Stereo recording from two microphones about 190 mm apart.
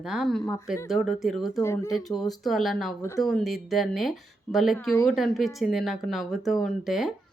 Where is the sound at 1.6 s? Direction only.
15° left (ahead or behind).